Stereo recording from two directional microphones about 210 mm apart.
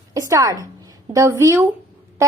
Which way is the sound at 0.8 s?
15° right (ahead or behind).